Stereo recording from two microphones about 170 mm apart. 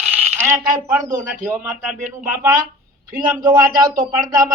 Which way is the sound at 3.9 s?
55° right (ahead or behind).